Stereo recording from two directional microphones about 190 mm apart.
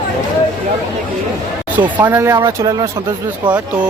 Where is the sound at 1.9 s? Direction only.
10° right (ahead or behind).